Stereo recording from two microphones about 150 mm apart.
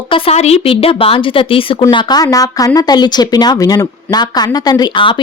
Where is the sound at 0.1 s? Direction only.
40° left (ahead or behind).